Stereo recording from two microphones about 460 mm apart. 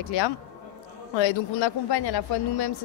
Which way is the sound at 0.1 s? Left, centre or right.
Left.